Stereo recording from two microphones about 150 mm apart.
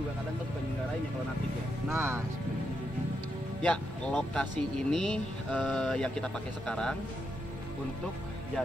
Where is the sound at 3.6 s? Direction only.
5° left (ahead or behind).